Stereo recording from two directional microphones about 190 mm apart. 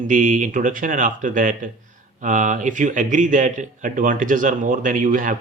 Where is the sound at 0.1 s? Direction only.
45° right (ahead or behind).